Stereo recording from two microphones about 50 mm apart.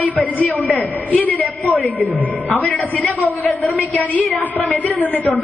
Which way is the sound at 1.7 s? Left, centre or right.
Left.